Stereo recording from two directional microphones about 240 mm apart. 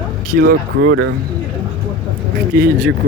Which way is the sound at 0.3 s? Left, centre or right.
Right.